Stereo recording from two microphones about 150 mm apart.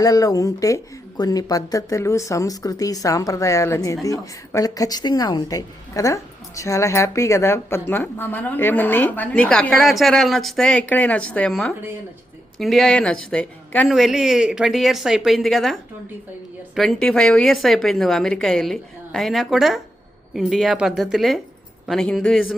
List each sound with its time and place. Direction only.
0.0 s a woman's voice: 25° left (ahead or behind); by 22.5 s 5° left (ahead or behind)